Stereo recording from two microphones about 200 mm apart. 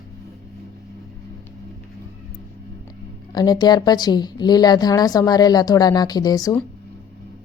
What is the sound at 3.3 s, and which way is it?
A woman's voice, 20° left (ahead or behind).